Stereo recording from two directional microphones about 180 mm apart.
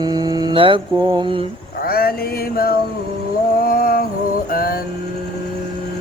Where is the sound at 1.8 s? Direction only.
55° left (ahead or behind).